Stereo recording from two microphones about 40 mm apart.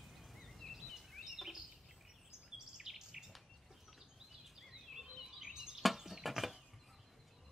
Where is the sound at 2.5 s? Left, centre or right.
Centre.